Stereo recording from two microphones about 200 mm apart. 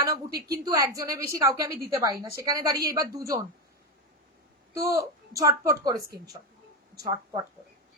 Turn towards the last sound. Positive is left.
turn(degrees=-15)  # may be behind; listen again after turning